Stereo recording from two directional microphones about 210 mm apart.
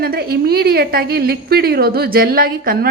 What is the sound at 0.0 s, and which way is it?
A woman's voice, 45° right (ahead or behind).